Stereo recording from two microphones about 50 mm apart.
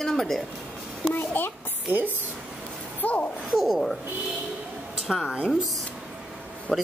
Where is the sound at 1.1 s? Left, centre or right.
Left.